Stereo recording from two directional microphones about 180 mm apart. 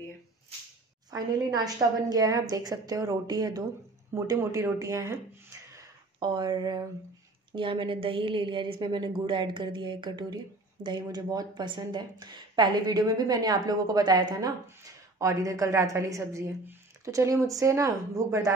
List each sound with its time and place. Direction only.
1.1 s a woman's voice: 20° right (ahead or behind)